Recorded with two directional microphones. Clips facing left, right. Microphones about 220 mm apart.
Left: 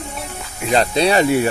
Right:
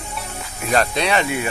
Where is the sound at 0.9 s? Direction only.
35° left (ahead or behind).